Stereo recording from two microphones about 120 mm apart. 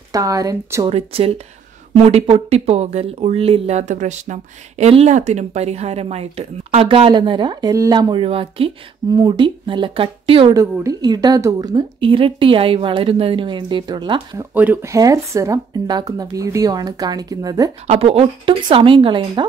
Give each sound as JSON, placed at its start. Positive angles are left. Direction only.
{"t": 0.1, "sound": "speech", "side_deg": -30}
{"t": 0.8, "sound": "speech", "side_deg": -55}
{"t": 7.7, "sound": "speech", "side_deg": -30}
{"t": 8.2, "sound": "speech", "side_deg": -50}
{"t": 9.1, "sound": "speech", "side_deg": -35}
{"t": 10.8, "sound": "a woman's voice", "side_deg": -30}
{"t": 14.5, "sound": "speech", "side_deg": -15}
{"t": 14.9, "sound": "a woman's voice", "side_deg": -25}
{"t": 17.8, "sound": "speech", "side_deg": -55}